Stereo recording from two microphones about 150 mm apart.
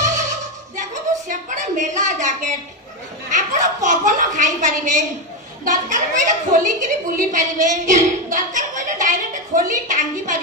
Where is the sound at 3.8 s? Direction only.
55° right (ahead or behind).